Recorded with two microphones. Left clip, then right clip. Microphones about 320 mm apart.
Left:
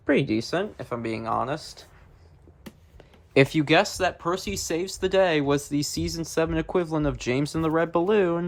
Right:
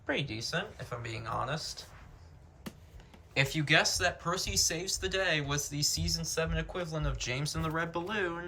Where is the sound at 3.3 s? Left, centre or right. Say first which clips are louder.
Left 8 dB; centre.